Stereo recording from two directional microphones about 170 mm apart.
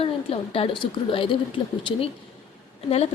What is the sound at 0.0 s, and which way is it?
A woman's voice, 35° left (ahead or behind).